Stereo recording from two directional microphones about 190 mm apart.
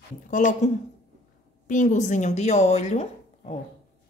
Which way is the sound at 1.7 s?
40° left (ahead or behind).